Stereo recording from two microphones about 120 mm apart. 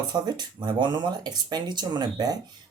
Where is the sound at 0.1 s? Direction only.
35° right (ahead or behind).